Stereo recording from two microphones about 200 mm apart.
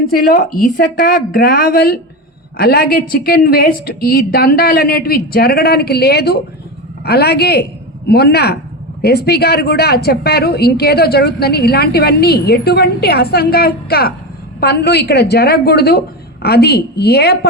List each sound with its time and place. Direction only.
0.2 s a woman's voice: 45° left (ahead or behind)